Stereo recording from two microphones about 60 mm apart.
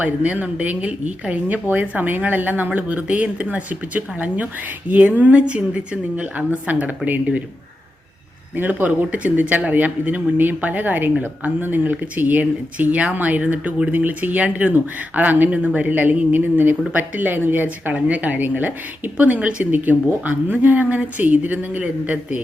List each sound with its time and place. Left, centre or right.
0.0 s speech: right
8.5 s speech: right
17.9 s speech: right